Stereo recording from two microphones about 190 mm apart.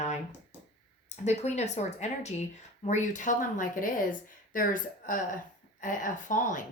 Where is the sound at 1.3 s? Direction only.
35° left (ahead or behind).